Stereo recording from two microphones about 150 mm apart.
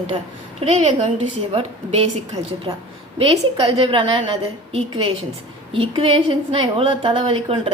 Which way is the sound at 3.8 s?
35° right (ahead or behind).